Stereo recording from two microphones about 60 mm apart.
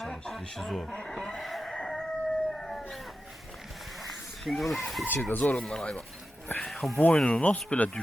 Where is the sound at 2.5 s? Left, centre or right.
Centre.